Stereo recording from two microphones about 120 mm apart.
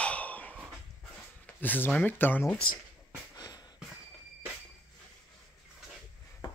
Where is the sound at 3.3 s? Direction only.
35° left (ahead or behind).